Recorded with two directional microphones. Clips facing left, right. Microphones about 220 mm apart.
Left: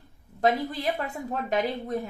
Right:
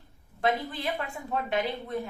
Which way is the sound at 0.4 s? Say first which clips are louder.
Left 4 dB; 40° left (ahead or behind).